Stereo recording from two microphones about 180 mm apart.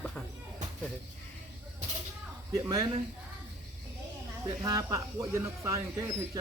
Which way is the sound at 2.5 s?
20° right (ahead or behind).